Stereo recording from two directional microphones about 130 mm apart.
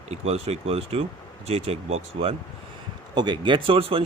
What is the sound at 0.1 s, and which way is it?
Speech, 55° right (ahead or behind).